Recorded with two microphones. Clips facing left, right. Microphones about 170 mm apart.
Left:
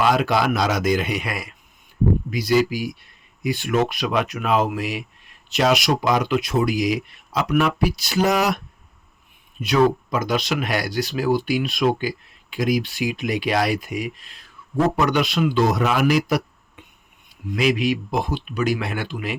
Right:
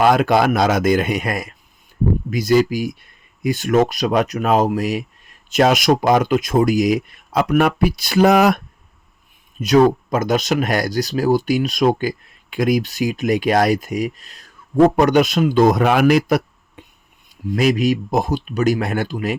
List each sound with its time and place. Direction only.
0.0 s speech: 50° right (ahead or behind)
9.6 s speech: 45° right (ahead or behind)
16.8 s a sound: 35° right (ahead or behind)
17.5 s speech: 40° right (ahead or behind)